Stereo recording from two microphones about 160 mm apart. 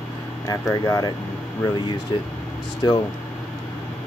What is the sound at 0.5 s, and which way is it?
Speech, 20° left (ahead or behind).